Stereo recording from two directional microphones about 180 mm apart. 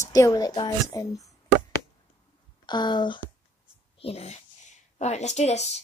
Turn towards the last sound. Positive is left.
turn(degrees=40)  # may be behind; listen again after turning